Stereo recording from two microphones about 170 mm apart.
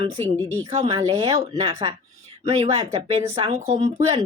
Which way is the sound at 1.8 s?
30° right (ahead or behind).